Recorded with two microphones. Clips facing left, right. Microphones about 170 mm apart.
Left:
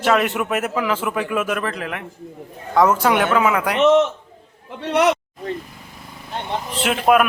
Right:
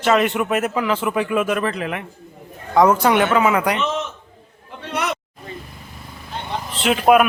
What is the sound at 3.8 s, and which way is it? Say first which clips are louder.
A man's voice: left 10 dB; 80° left.